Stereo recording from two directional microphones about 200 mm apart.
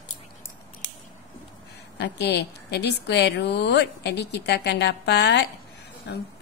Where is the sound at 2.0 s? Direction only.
55° left (ahead or behind).